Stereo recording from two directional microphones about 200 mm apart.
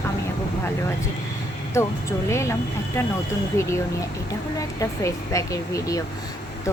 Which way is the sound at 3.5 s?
15° left (ahead or behind).